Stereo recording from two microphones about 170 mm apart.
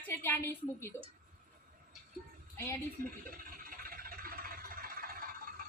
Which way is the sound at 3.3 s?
55° right (ahead or behind).